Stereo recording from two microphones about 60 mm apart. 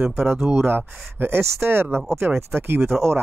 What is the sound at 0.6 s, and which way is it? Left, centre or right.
Speech, right.